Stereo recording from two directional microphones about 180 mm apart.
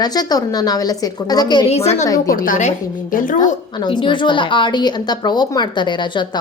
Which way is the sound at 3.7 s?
25° left (ahead or behind).